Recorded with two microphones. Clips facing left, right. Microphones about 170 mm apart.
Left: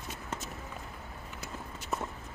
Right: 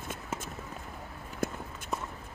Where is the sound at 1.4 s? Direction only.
50° right (ahead or behind).